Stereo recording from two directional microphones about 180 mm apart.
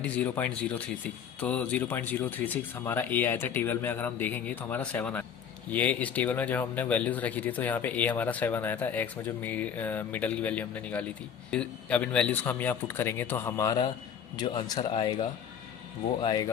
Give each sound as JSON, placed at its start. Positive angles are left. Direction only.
{"t": 0.0, "sound": "speech", "side_deg": 10}